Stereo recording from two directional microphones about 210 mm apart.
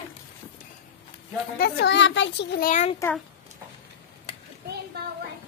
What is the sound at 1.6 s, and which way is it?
A child's voice, 50° left (ahead or behind).